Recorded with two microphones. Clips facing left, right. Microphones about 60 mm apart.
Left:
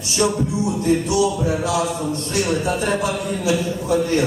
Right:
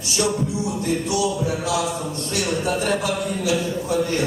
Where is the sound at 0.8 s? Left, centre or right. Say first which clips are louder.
Left 5 dB; left.